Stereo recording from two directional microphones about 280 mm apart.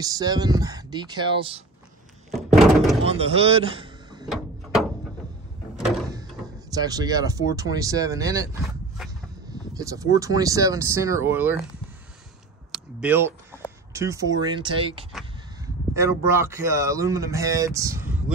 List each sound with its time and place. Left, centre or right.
0.0 s speech: centre
2.3 s thunk: centre
3.1 s speech: right
6.7 s speech: centre
9.5 s a sound: centre
10.1 s speech: centre
12.7 s a sound: centre
13.9 s speech: centre